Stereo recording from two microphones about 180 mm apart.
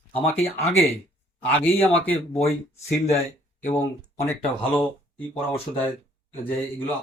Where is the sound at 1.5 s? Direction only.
10° left (ahead or behind).